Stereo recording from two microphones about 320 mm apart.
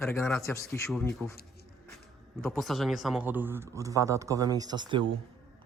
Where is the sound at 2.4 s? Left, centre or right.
Centre.